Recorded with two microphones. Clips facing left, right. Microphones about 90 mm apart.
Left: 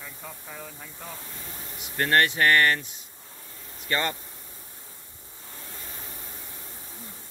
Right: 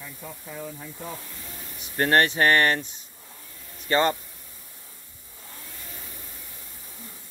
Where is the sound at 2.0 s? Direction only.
25° right (ahead or behind).